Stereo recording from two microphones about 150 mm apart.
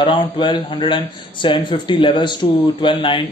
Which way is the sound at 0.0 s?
35° left (ahead or behind).